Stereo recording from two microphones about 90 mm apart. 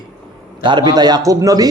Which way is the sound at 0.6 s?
55° right (ahead or behind).